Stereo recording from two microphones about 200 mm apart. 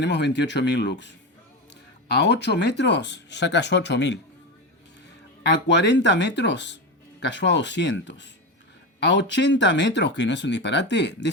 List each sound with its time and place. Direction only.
0.0 s speech: 60° left (ahead or behind)
5.6 s speech: 60° left (ahead or behind)